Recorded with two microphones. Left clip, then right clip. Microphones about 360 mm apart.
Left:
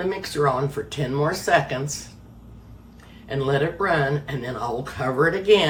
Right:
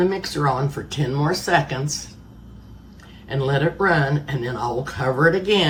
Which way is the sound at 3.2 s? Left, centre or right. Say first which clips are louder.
Right 1 dB; centre.